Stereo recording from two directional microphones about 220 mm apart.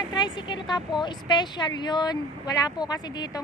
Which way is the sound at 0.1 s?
20° left (ahead or behind).